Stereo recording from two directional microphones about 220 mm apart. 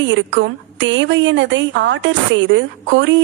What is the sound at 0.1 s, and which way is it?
Speech, 60° right (ahead or behind).